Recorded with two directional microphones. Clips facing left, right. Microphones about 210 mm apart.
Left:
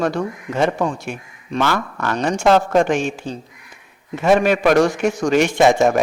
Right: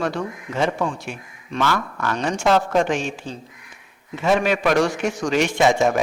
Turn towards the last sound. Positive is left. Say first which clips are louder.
# left 4 dB
turn(degrees=50)  # may be behind; listen again after turning